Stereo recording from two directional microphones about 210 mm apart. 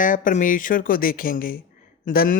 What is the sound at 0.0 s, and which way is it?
Speech, 40° left (ahead or behind).